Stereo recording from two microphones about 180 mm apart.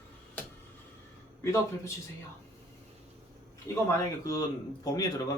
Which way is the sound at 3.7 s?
15° left (ahead or behind).